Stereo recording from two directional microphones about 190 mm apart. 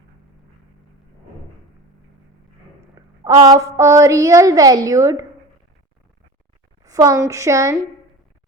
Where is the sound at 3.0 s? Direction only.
20° right (ahead or behind).